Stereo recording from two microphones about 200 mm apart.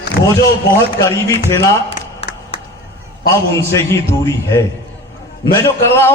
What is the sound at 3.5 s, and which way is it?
Speech, 15° left (ahead or behind).